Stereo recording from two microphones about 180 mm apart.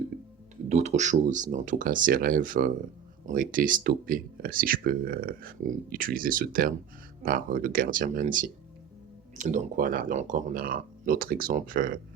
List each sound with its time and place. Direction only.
0.7 s speech: 40° right (ahead or behind)